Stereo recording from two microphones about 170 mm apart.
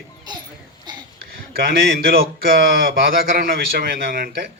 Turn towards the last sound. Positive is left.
turn(degrees=-60)  # may be behind; listen again after turning